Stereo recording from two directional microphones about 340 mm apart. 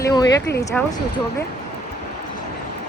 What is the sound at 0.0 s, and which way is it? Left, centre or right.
Speech, centre.